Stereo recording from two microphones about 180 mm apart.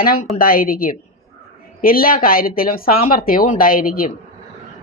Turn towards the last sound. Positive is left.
turn(degrees=50)  # may be behind; listen again after turning